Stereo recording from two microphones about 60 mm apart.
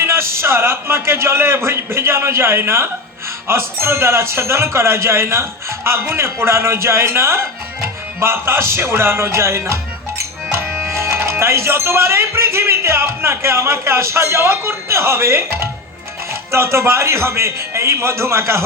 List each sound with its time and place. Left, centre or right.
0.0 s speech: right
10.9 s speech: right